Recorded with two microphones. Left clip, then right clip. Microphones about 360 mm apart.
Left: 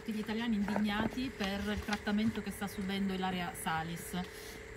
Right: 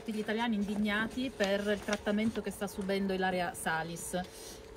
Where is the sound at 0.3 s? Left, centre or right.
Centre.